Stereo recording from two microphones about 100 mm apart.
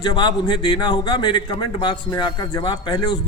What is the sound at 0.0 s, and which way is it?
Speech, 45° left (ahead or behind).